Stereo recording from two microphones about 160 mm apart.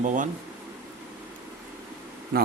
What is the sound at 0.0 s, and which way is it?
Speech, 55° right (ahead or behind).